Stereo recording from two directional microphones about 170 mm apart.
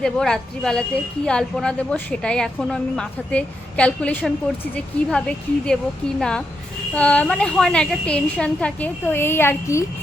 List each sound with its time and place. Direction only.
0.0 s a woman's voice: 5° left (ahead or behind)